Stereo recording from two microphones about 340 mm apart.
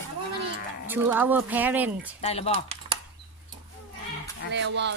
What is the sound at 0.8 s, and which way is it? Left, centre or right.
Speech, centre.